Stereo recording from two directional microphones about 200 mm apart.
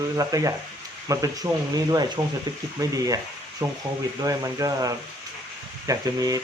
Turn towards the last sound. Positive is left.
turn(degrees=-15)  # may be behind; listen again after turning